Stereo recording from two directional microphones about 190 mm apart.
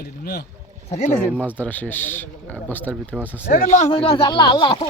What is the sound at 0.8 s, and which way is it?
Speech, 35° left (ahead or behind).